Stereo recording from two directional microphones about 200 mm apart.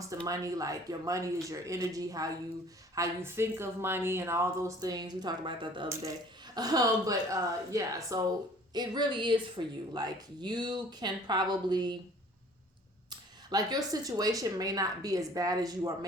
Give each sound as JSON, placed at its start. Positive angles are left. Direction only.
{"t": 0.3, "sound": "speech", "side_deg": -15}
{"t": 13.1, "sound": "speech", "side_deg": -20}